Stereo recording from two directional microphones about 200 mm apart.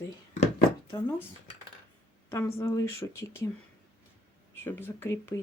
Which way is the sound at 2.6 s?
15° left (ahead or behind).